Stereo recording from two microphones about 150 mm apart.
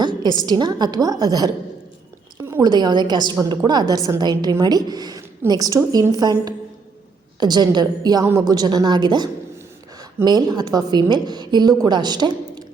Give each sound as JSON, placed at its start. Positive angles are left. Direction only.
{"t": 0.0, "sound": "a woman's voice", "side_deg": -30}